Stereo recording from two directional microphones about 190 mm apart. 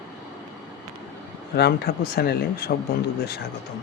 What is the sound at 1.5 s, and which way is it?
Speech, 55° left (ahead or behind).